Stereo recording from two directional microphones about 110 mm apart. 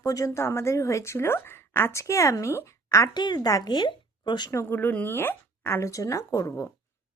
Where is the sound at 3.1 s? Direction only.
40° left (ahead or behind).